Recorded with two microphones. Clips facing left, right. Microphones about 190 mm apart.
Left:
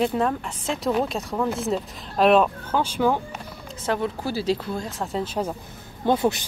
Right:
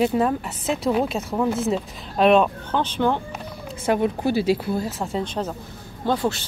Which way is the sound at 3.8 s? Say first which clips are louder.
Right 5 dB; 15° right (ahead or behind).